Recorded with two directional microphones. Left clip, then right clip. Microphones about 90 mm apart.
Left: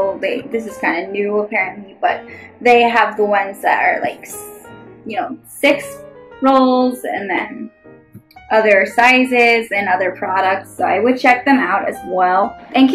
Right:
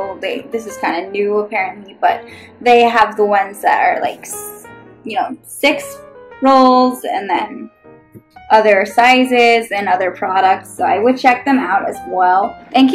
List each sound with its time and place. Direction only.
0.2 s a woman's voice: 15° right (ahead or behind)
6.4 s speech: centre (ahead or behind)
7.1 s a woman's voice: 15° right (ahead or behind)
8.5 s a woman's voice: 20° right (ahead or behind); by 11.9 s 5° left (ahead or behind)
11.9 s speech: 30° left (ahead or behind)
12.2 s speech: 10° left (ahead or behind)